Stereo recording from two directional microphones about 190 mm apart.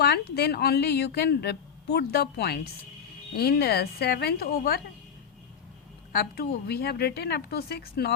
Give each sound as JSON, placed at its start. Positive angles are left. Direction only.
{"t": 0.0, "sound": "a woman's voice", "side_deg": 60}
{"t": 6.1, "sound": "a woman's voice", "side_deg": 55}